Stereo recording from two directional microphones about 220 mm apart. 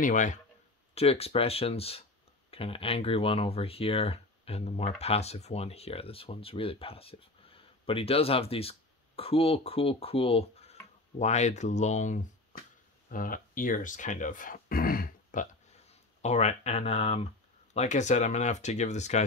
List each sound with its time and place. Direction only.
0.0 s speech: 35° left (ahead or behind)
16.2 s speech: 30° left (ahead or behind)